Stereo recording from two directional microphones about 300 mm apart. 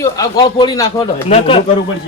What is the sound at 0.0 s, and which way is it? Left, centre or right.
Speech, centre.